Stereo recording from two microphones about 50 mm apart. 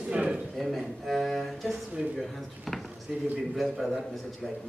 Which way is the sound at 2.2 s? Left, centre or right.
Centre.